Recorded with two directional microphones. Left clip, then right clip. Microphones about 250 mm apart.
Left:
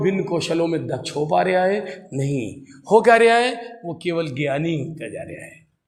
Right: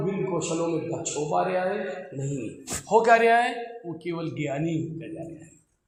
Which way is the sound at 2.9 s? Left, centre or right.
Left.